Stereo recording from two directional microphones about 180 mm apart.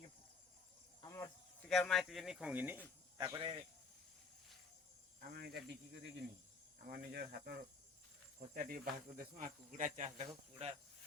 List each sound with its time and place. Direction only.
1.0 s cricket: 15° left (ahead or behind)
1.6 s speech: centre (ahead or behind)
3.2 s speech: 25° right (ahead or behind)
5.3 s speech: 60° right (ahead or behind)
6.8 s speech: 60° right (ahead or behind); by 10.8 s 35° right (ahead or behind)